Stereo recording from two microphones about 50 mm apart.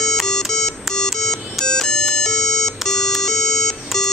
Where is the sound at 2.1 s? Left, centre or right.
Centre.